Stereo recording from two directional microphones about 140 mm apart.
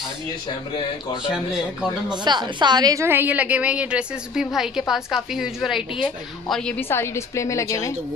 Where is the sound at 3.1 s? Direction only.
15° right (ahead or behind); by 8.0 s 20° left (ahead or behind).